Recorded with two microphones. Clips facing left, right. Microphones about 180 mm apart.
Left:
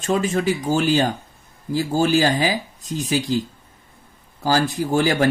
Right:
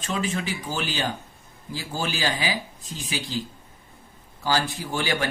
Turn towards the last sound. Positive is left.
turn(degrees=40)  # may be behind; listen again after turning